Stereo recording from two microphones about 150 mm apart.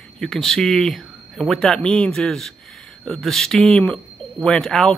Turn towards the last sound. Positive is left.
turn(degrees=0)  # may be behind; listen again after turning